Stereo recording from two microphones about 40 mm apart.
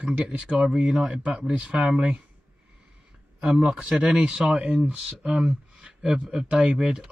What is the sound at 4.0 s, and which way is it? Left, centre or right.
Speech, right.